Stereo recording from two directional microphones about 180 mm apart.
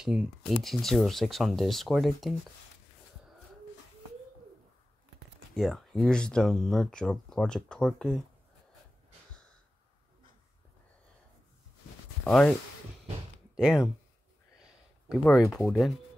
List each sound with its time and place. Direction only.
0.0 s speech: 5° right (ahead or behind)
5.6 s speech: centre (ahead or behind)
12.3 s speech: 5° left (ahead or behind)
13.6 s speech: 5° right (ahead or behind)
15.3 s speech: centre (ahead or behind)